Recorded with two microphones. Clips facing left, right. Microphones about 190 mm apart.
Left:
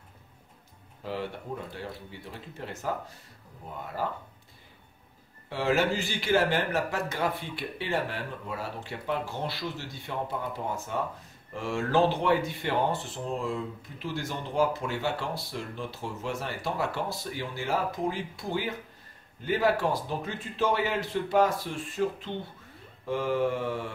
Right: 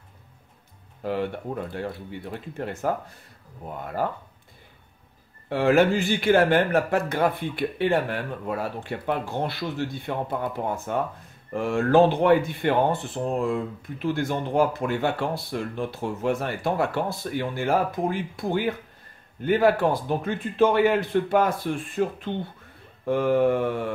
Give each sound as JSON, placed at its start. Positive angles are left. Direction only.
{"t": 1.0, "sound": "speech", "side_deg": -55}
{"t": 4.0, "sound": "speech", "side_deg": -55}
{"t": 5.5, "sound": "speech", "side_deg": -55}